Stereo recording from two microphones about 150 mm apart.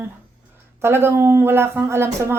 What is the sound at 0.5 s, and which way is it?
Speech, 15° right (ahead or behind).